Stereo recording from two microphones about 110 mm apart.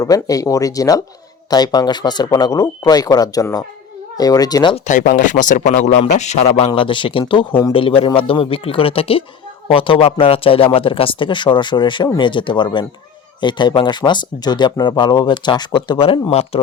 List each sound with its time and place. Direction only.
0.0 s speech: 30° left (ahead or behind)
5.6 s a man's voice: 90° left
6.7 s speech: 50° left (ahead or behind)
16.0 s speech: 55° left (ahead or behind)